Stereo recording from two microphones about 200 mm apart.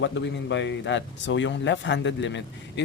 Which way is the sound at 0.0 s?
65° left (ahead or behind).